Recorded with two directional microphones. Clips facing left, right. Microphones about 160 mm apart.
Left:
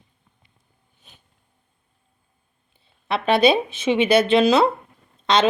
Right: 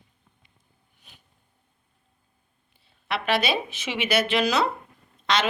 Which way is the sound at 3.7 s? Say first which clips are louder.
Left 8 dB; 30° left (ahead or behind).